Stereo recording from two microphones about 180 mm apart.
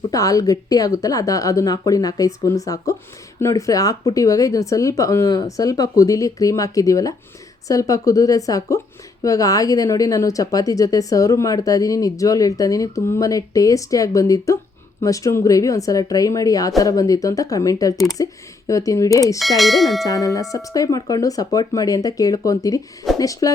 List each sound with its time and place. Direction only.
0.0 s a woman's voice: 20° left (ahead or behind)
19.4 s speech: centre (ahead or behind)
20.1 s a woman's voice: 20° left (ahead or behind)